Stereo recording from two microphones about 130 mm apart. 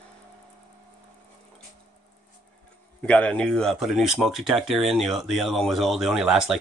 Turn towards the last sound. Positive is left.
turn(degrees=-5)  # may be behind; listen again after turning